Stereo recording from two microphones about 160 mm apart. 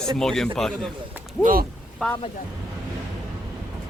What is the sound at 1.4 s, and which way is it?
Speech, 65° right (ahead or behind).